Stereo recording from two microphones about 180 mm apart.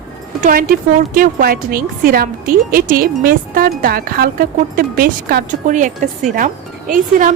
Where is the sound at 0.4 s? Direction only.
50° right (ahead or behind).